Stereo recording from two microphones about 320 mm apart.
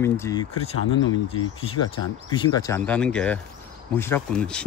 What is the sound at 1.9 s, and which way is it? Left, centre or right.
Speech, centre.